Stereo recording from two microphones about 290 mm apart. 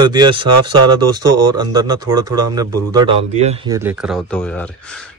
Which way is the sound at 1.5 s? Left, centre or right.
Centre.